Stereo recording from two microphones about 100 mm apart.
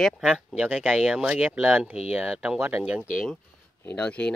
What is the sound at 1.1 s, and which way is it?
Speech, 10° right (ahead or behind).